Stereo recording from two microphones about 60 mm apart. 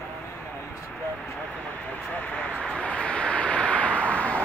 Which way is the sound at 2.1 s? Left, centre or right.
Left.